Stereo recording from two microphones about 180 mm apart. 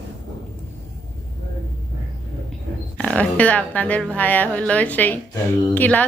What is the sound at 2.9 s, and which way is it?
Speech, 5° left (ahead or behind).